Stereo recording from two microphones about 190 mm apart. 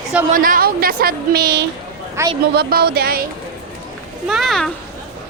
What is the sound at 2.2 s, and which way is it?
Speech, 15° right (ahead or behind).